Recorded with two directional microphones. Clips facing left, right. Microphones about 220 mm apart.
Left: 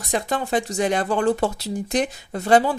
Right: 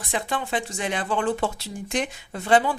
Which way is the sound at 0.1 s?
40° left (ahead or behind).